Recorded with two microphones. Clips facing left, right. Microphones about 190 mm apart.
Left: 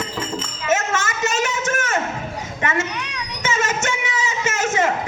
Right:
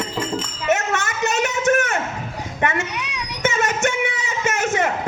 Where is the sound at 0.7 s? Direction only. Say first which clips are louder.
Even; 60° right (ahead or behind).